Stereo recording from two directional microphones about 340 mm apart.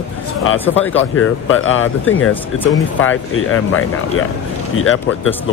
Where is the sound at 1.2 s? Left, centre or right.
Left.